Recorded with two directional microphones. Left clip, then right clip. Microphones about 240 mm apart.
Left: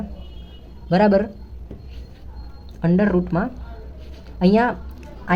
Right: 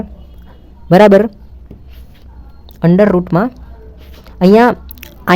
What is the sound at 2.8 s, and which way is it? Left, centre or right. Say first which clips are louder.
A woman's voice: right 10 dB; right.